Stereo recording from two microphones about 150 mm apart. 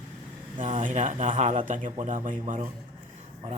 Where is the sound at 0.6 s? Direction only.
55° right (ahead or behind).